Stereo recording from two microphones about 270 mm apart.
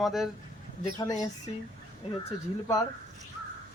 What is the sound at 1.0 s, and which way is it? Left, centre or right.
Speech, centre.